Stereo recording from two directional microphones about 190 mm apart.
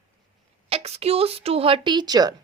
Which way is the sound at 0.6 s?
30° right (ahead or behind).